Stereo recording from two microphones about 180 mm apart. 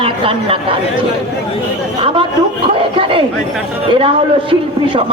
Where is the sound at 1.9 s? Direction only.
30° right (ahead or behind).